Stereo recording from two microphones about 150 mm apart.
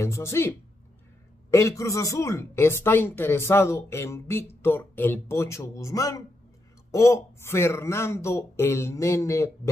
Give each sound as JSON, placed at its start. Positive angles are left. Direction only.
{"t": 0.0, "sound": "speech", "side_deg": 20}